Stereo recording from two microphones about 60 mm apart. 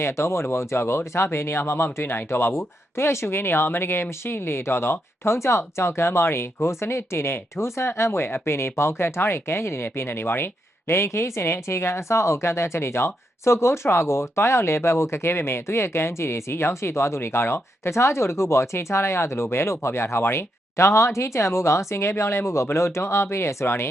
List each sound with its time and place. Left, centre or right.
0.0 s speech: left